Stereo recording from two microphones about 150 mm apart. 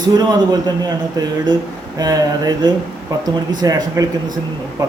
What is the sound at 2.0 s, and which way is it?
A man's voice, 25° right (ahead or behind).